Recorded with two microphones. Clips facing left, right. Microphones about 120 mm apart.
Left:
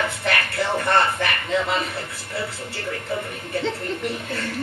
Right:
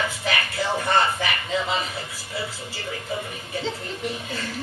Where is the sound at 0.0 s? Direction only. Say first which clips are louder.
Left 2 dB; 60° left (ahead or behind).